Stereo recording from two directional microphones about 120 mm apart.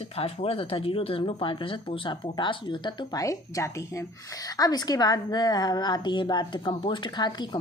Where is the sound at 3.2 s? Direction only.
25° left (ahead or behind).